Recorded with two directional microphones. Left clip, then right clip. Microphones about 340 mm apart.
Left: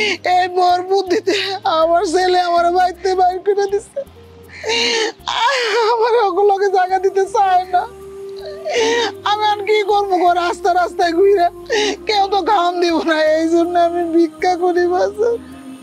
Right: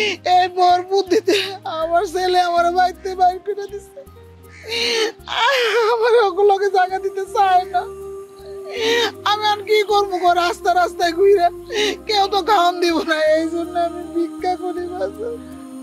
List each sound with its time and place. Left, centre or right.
0.0 s speech: left